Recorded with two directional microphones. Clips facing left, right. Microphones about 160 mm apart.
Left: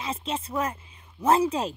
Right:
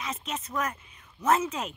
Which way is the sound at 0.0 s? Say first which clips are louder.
Left 4 dB; 30° left (ahead or behind).